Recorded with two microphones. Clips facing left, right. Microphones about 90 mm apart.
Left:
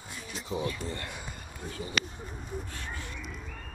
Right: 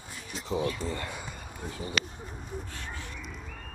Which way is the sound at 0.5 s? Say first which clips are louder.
Right 3 dB; 40° right (ahead or behind).